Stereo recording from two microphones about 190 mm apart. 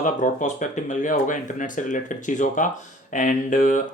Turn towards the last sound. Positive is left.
turn(degrees=45)  # may be behind; listen again after turning